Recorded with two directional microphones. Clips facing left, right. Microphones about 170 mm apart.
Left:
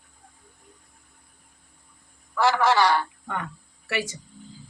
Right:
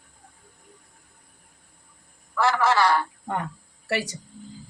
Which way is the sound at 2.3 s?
Centre (ahead or behind).